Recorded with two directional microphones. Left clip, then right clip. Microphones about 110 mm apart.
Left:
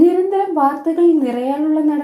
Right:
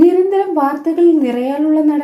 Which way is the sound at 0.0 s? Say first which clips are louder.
Right 3 dB; 25° left (ahead or behind).